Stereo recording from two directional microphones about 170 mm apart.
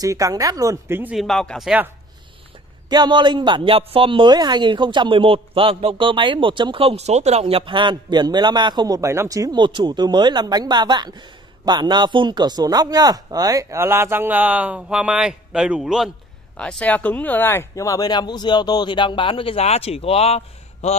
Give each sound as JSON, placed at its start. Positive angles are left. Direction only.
{"t": 0.0, "sound": "a woman's voice", "side_deg": -20}
{"t": 1.1, "sound": "speech", "side_deg": 0}
{"t": 2.9, "sound": "a woman's voice", "side_deg": -25}